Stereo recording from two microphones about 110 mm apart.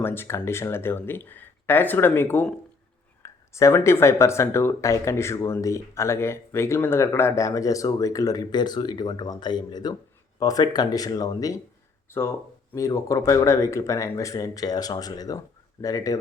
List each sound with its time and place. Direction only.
0.0 s speech: 20° left (ahead or behind)
12.1 s speech: 20° left (ahead or behind)